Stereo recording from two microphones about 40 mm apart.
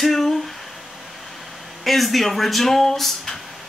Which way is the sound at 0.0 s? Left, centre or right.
Centre.